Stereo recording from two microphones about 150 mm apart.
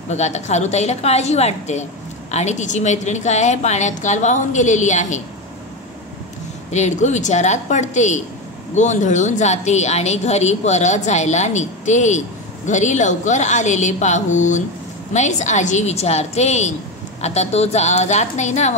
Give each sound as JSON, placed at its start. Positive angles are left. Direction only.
{"t": 0.1, "sound": "speech", "side_deg": 50}
{"t": 6.7, "sound": "speech", "side_deg": 50}